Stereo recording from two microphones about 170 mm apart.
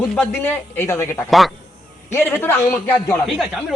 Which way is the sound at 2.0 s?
15° left (ahead or behind).